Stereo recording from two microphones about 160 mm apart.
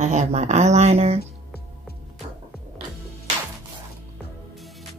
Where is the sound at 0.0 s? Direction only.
45° right (ahead or behind).